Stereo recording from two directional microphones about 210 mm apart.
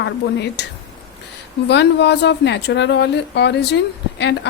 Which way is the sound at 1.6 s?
55° left (ahead or behind).